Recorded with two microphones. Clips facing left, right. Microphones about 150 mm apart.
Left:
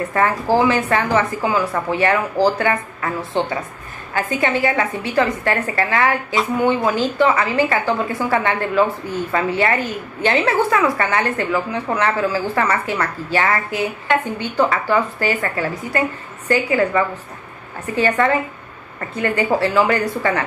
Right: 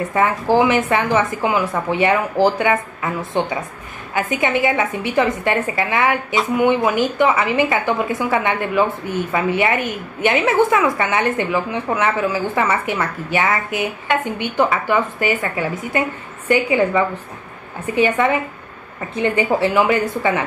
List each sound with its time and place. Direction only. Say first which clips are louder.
0.6 s a woman's voice: right 1 dB; 20° right (ahead or behind)